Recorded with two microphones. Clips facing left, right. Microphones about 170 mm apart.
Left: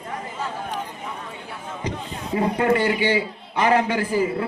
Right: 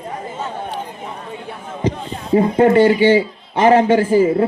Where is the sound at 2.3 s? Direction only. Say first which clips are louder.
Right 8 dB; 30° right (ahead or behind).